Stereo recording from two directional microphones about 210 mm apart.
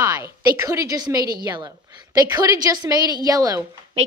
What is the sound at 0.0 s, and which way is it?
A woman's voice, 15° right (ahead or behind).